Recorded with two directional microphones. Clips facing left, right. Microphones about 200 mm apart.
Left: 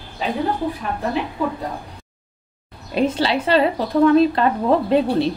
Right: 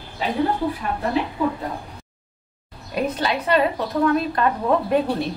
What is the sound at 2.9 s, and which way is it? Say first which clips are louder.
A woman's voice: left 4 dB; 25° left (ahead or behind).